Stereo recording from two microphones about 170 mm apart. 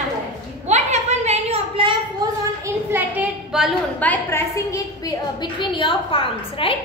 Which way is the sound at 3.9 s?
10° left (ahead or behind).